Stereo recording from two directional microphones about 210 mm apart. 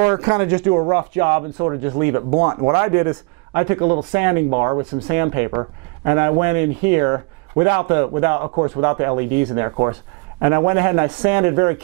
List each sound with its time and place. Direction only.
0.1 s speech: 15° right (ahead or behind)